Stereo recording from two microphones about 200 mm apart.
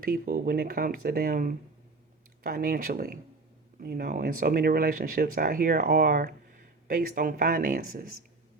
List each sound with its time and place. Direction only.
0.0 s speech: 45° right (ahead or behind)